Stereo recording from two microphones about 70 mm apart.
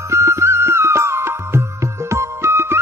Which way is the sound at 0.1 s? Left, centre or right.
Right.